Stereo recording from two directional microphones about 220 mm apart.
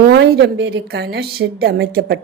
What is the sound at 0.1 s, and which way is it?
Speech, 50° right (ahead or behind).